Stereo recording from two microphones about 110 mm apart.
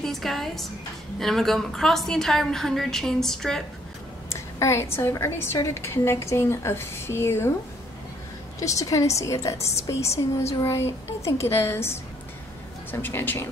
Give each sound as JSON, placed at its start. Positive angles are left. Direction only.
{"t": 0.0, "sound": "a woman's voice", "side_deg": 0}
{"t": 4.3, "sound": "a woman's voice", "side_deg": 25}
{"t": 8.5, "sound": "a woman's voice", "side_deg": 30}
{"t": 11.2, "sound": "a woman's voice", "side_deg": 25}